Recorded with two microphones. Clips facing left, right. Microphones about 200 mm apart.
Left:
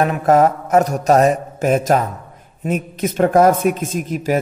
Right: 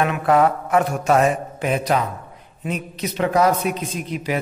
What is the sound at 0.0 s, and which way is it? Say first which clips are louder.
Mantra: left 3 dB; 40° left (ahead or behind).